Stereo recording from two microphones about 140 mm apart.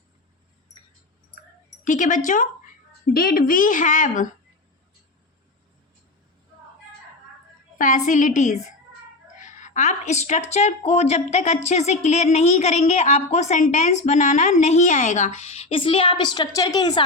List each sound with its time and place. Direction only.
1.8 s a woman's voice: 65° left (ahead or behind)
3.1 s a woman's voice: 90° left; by 4.3 s 65° left (ahead or behind)
7.8 s a woman's voice: 70° left (ahead or behind); by 17.0 s 30° left (ahead or behind)